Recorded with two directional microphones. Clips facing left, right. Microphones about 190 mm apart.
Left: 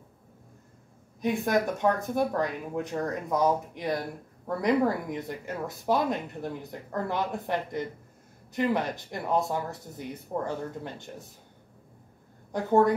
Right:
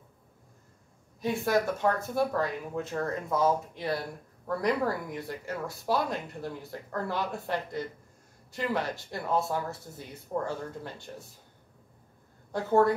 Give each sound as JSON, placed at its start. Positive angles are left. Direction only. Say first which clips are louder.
{"t": 1.2, "sound": "speech", "louder": "left 1 dB", "side_deg": 20}
{"t": 12.5, "sound": "speech", "louder": "left 1 dB", "side_deg": 15}